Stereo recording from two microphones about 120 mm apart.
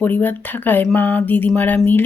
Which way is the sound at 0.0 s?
15° left (ahead or behind).